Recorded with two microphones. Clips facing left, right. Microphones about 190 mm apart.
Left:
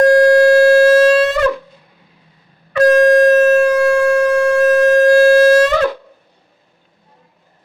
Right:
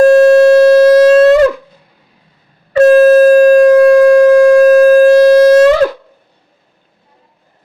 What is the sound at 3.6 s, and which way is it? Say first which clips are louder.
Siren: right 8 dB; 40° right (ahead or behind).